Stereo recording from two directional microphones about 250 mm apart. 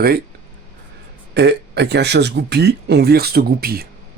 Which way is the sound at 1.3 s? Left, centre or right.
Right.